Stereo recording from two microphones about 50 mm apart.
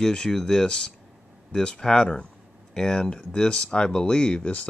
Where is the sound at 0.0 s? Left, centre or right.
Centre.